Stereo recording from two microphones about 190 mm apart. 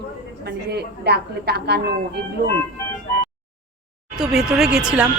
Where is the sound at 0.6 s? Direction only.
60° right (ahead or behind).